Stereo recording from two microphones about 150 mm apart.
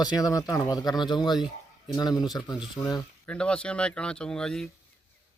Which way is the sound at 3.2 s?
5° left (ahead or behind).